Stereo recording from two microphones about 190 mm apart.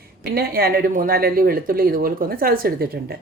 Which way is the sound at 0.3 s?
50° right (ahead or behind).